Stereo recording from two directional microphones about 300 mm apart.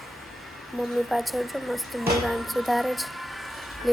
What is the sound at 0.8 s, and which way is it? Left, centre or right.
Speech, centre.